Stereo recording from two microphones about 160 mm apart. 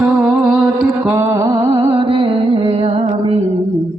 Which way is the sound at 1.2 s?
20° right (ahead or behind).